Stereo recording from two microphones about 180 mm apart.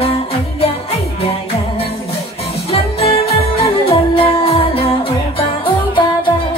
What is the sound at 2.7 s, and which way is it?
Music, 30° left (ahead or behind).